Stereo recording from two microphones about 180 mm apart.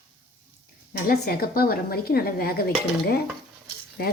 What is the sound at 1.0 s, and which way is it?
Speech, 60° left (ahead or behind).